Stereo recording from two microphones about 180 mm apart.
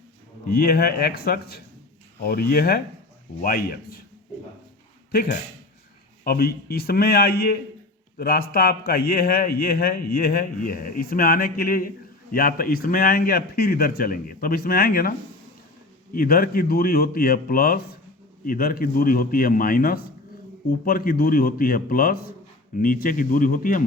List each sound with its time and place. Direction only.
0.5 s a man's voice: 60° left (ahead or behind)
5.1 s a man's voice: 55° left (ahead or behind)
16.1 s a man's voice: 55° left (ahead or behind)